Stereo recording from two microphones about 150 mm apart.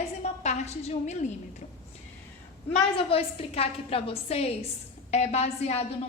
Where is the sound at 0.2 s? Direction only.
50° left (ahead or behind).